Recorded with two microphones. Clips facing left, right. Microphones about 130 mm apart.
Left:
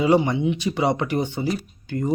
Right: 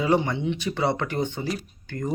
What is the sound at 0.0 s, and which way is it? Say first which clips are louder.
Speech: left 4 dB; 20° left (ahead or behind).